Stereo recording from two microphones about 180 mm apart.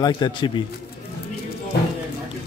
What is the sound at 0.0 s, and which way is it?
Speech, 25° left (ahead or behind).